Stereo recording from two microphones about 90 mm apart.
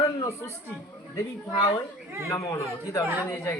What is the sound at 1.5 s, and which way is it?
Speech, 75° left (ahead or behind).